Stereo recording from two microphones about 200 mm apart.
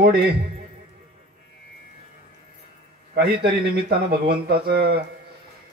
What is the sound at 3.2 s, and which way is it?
A man's voice, 50° right (ahead or behind).